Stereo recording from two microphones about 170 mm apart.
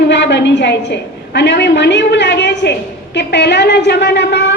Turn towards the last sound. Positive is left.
turn(degrees=90)